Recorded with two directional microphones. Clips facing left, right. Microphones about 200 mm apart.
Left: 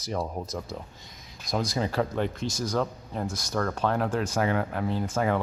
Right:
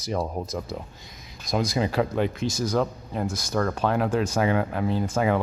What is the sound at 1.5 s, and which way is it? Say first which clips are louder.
A man's voice: right 3 dB; 10° right (ahead or behind).